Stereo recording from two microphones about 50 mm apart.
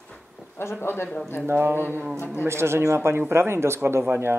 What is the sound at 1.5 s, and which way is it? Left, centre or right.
Speech, right.